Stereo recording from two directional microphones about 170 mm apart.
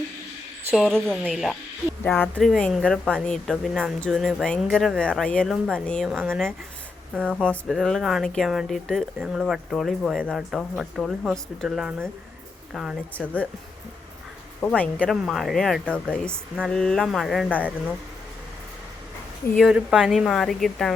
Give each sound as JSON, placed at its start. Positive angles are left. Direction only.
{"t": 0.9, "sound": "speech", "side_deg": 5}
{"t": 2.0, "sound": "speech", "side_deg": 10}
{"t": 7.3, "sound": "speech", "side_deg": 5}
{"t": 13.1, "sound": "speech", "side_deg": 10}
{"t": 14.6, "sound": "speech", "side_deg": 10}
{"t": 19.5, "sound": "speech", "side_deg": -5}